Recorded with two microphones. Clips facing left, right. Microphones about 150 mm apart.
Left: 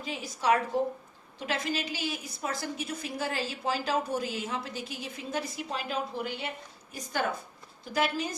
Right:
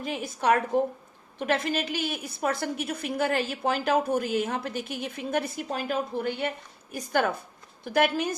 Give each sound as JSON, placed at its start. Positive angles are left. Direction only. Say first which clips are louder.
{"t": 0.0, "sound": "a woman's voice", "louder": "right 3 dB", "side_deg": -55}